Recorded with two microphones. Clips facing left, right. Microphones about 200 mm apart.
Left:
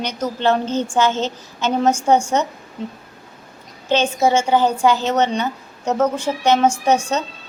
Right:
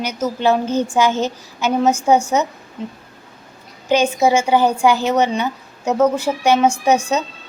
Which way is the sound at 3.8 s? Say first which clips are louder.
Right 2 dB; 10° right (ahead or behind).